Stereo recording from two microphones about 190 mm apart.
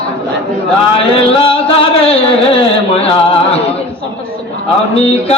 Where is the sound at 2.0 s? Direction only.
30° left (ahead or behind).